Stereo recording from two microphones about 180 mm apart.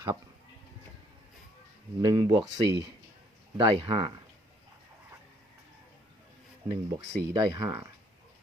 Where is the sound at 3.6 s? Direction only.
30° right (ahead or behind).